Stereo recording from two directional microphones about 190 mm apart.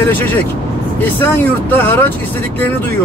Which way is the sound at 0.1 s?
10° left (ahead or behind).